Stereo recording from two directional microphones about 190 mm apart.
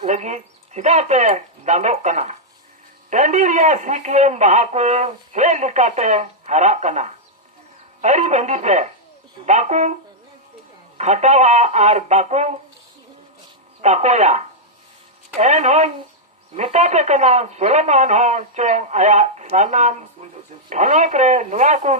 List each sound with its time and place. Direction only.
0.0 s a man's voice: 35° right (ahead or behind)
10.9 s a man's voice: 35° right (ahead or behind)
13.8 s a man's voice: 35° right (ahead or behind)